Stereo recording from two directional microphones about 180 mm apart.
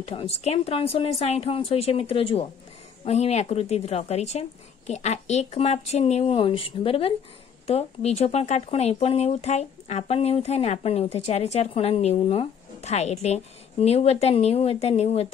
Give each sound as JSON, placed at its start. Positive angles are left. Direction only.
{"t": 0.0, "sound": "speech", "side_deg": 35}